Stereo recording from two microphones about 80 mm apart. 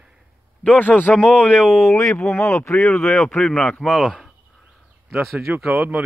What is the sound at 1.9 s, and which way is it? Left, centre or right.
Speech, left.